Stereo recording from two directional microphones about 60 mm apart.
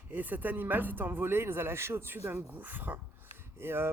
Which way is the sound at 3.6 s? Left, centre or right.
Right.